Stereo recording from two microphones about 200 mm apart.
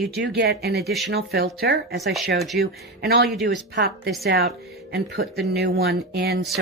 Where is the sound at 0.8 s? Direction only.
Centre (ahead or behind).